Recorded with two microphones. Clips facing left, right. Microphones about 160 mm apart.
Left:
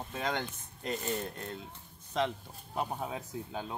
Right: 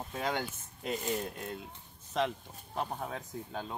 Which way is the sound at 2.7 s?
10° left (ahead or behind).